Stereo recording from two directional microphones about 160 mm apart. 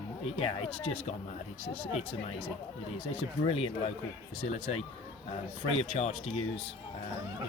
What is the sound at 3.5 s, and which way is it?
Speech, 35° left (ahead or behind).